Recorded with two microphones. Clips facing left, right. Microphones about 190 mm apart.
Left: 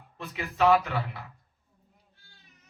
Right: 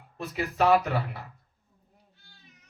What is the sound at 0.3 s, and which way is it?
Speech, 35° right (ahead or behind).